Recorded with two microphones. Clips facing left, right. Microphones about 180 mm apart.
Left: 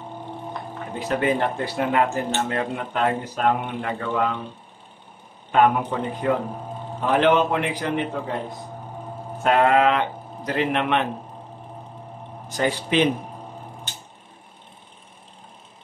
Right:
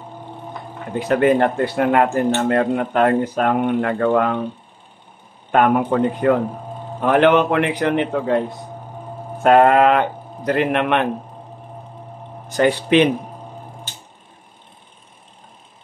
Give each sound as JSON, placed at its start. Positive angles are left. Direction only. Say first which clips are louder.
{"t": 0.9, "sound": "speech", "louder": "right 7 dB", "side_deg": -60}
{"t": 5.5, "sound": "a man's voice", "louder": "right 3 dB", "side_deg": -55}
{"t": 9.4, "sound": "speech", "louder": "right 6 dB", "side_deg": -50}
{"t": 12.5, "sound": "speech", "louder": "right 6 dB", "side_deg": -65}